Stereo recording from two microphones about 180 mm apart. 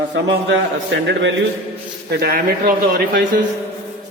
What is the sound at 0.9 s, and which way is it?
Speech, 90° right.